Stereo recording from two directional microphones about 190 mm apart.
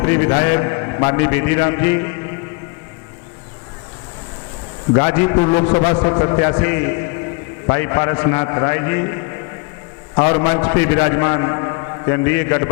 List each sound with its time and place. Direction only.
0.0 s a man's voice: 20° left (ahead or behind)
4.9 s a man's voice: 20° left (ahead or behind)